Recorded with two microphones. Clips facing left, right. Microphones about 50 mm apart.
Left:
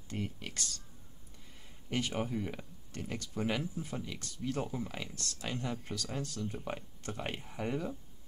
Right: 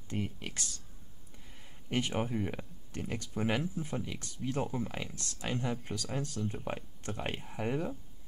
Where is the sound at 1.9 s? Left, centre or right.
Centre.